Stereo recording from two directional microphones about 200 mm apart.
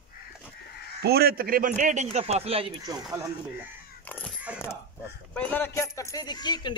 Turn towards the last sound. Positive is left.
turn(degrees=20)  # may be behind; listen again after turning